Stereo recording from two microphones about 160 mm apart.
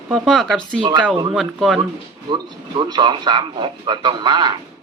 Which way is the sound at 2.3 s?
30° right (ahead or behind).